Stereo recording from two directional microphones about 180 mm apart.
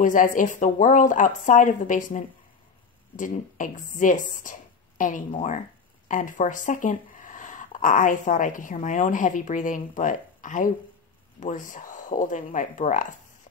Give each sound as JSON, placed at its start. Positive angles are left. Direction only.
{"t": 0.0, "sound": "speech", "side_deg": 45}